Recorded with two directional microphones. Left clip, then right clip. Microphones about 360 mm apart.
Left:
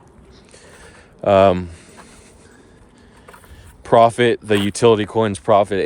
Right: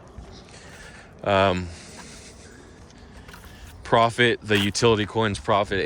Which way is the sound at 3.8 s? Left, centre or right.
Centre.